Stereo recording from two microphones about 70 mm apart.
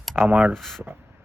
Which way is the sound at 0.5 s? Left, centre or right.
Centre.